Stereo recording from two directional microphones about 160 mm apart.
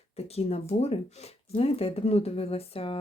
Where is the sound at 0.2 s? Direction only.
40° left (ahead or behind).